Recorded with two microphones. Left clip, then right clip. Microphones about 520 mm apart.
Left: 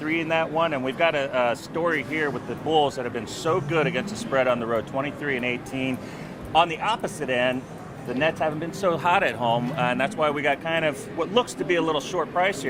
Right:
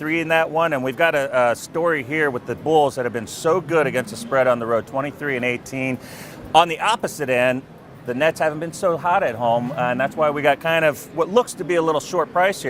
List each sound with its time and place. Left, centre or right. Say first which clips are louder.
0.0 s speech: right 5 dB; right
6.5 s a man's voice: right 5 dB; right
8.9 s speech: right 2 dB; right